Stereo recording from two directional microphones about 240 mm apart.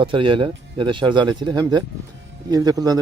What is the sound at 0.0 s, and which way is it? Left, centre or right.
Speech, right.